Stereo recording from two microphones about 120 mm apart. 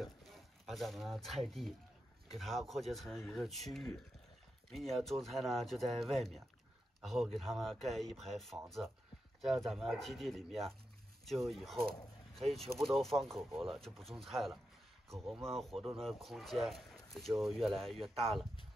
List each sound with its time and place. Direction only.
0.0 s speech: centre (ahead or behind)